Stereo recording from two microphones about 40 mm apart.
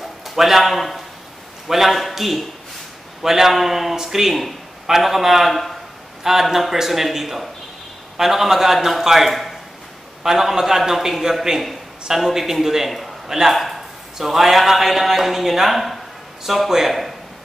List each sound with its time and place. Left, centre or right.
0.0 s a man's voice: centre
6.2 s a man's voice: centre
9.3 s a sound: centre
10.2 s a man's voice: centre
13.6 s a sound: centre
14.1 s a man's voice: centre